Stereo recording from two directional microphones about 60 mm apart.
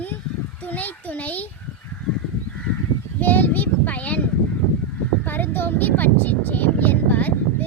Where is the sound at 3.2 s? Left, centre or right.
Left.